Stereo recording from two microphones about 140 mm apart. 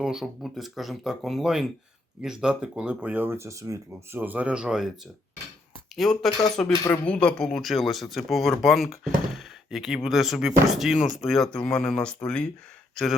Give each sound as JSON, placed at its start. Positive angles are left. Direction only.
{"t": 0.0, "sound": "speech", "side_deg": -5}
{"t": 6.0, "sound": "speech", "side_deg": 0}
{"t": 6.7, "sound": "speech", "side_deg": 25}
{"t": 7.0, "sound": "speech", "side_deg": 10}